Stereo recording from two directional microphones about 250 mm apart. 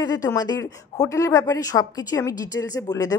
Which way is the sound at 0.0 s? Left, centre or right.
Centre.